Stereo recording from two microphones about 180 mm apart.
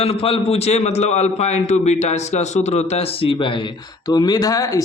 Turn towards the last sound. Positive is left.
turn(degrees=20)  # may be behind; listen again after turning